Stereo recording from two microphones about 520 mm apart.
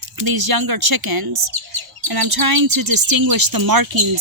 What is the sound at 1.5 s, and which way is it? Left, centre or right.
Chirp, right.